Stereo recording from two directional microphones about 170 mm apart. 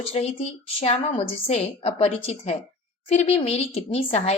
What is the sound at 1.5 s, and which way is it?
A woman's voice, 35° left (ahead or behind).